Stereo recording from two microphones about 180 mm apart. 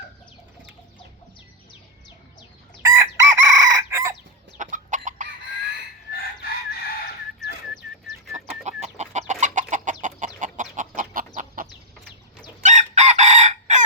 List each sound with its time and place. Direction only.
2.8 s chicken: 20° right (ahead or behind)
4.5 s chicken: 45° right (ahead or behind)
7.7 s music: centre (ahead or behind)
8.6 s chicken: 40° right (ahead or behind)